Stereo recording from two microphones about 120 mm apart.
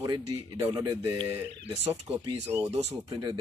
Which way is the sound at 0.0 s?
35° right (ahead or behind).